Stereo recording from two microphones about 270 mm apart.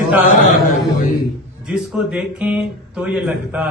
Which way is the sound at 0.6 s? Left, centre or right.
Left.